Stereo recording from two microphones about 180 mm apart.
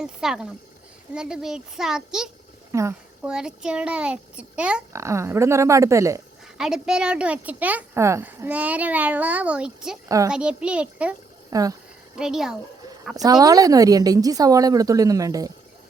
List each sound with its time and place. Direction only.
0.0 s a child's voice: 5° right (ahead or behind)
2.7 s speech: 15° right (ahead or behind)
3.2 s speech: 5° right (ahead or behind)
6.6 s a child's voice: 5° right (ahead or behind)
11.5 s a woman's voice: 20° right (ahead or behind)
12.1 s a child's voice: 5° right (ahead or behind)
13.2 s a woman's voice: 20° right (ahead or behind)